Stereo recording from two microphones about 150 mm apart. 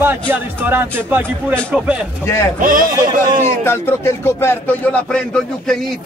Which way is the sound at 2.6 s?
70° right (ahead or behind).